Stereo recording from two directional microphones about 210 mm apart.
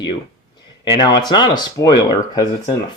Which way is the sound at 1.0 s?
20° left (ahead or behind).